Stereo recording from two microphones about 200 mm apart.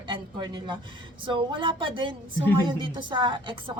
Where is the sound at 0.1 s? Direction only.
20° right (ahead or behind).